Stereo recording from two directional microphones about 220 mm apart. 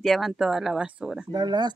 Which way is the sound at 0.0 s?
Centre (ahead or behind).